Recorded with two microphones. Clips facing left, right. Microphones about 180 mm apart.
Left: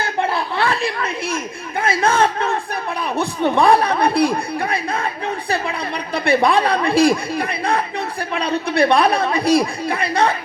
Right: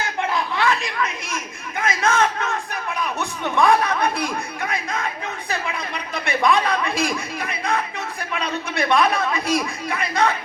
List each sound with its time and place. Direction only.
0.0 s a sound: 35° left (ahead or behind)
1.8 s a man's voice: 30° left (ahead or behind)
6.1 s a man's voice: 30° left (ahead or behind)